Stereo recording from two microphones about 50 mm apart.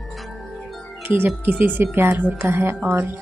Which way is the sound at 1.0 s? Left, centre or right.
Right.